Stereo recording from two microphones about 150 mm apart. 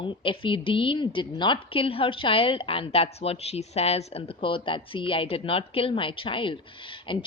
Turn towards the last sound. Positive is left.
turn(degrees=35)  # may be behind; listen again after turning